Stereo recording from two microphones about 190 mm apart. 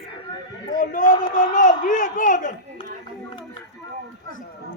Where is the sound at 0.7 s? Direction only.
40° left (ahead or behind).